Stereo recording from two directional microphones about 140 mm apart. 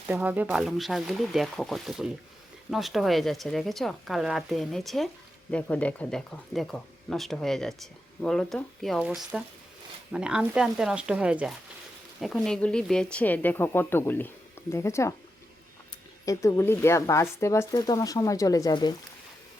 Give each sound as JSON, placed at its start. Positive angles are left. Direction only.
{"t": 0.1, "sound": "speech", "side_deg": -10}
{"t": 16.2, "sound": "speech", "side_deg": 25}